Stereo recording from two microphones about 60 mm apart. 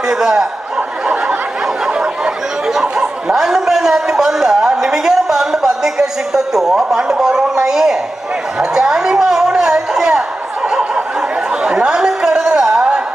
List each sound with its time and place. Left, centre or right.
0.1 s speech: centre
0.8 s snicker: centre
1.6 s chatter: centre
8.5 s a sound: centre
10.7 s chatter: centre